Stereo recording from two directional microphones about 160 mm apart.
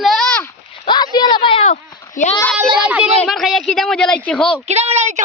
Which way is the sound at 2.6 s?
10° right (ahead or behind).